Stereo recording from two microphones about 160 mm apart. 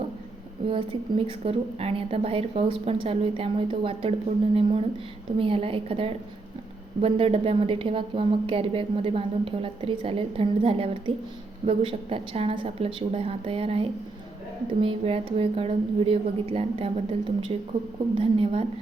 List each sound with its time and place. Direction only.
0.7 s a woman's voice: 35° right (ahead or behind)
5.4 s a woman's voice: 35° right (ahead or behind)